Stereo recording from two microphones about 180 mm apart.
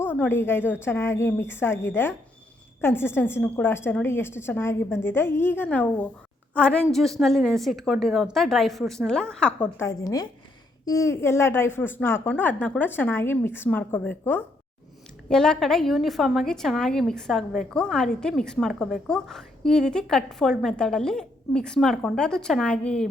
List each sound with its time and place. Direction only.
0.0 s a woman's voice: 10° left (ahead or behind)
10.0 s a woman's voice: 20° left (ahead or behind)